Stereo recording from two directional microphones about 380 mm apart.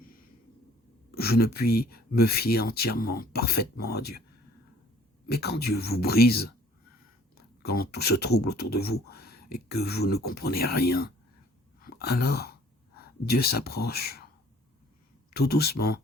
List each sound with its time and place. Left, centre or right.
1.1 s speech: left
5.3 s speech: left
7.6 s speech: left
11.8 s a sound: left
13.2 s speech: left
15.3 s speech: left